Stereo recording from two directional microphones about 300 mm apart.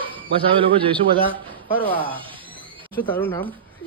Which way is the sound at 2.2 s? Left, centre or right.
Centre.